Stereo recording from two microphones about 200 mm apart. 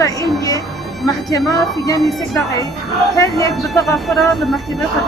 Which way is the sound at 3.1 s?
15° left (ahead or behind).